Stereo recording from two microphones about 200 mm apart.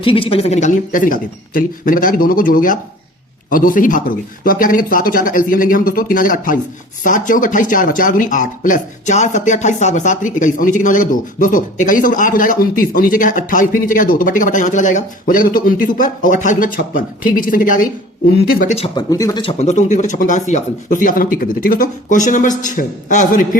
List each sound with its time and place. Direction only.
0.0 s speech: 25° left (ahead or behind)
18.9 s speech: 20° left (ahead or behind); by 23.6 s 40° left (ahead or behind)